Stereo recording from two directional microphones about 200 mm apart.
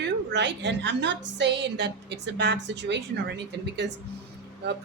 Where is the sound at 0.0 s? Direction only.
60° right (ahead or behind).